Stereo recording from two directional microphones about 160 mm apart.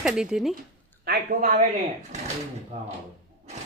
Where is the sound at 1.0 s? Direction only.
80° right.